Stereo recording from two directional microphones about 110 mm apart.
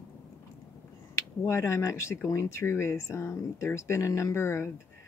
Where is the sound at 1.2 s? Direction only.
25° left (ahead or behind).